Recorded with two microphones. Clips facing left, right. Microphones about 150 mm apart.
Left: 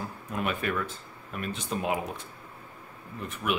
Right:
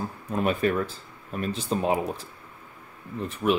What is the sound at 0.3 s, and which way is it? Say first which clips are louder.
Speech: right 6 dB; 35° right (ahead or behind).